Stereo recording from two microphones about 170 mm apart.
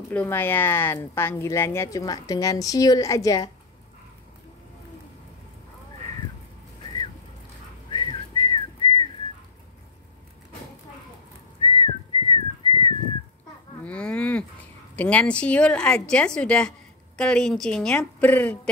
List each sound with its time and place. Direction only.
0.1 s a woman's voice: 10° left (ahead or behind)
7.9 s whistling: 30° left (ahead or behind)
11.6 s whistling: 30° left (ahead or behind)
13.8 s cattle: 5° left (ahead or behind)
15.0 s a woman's voice: 10° left (ahead or behind)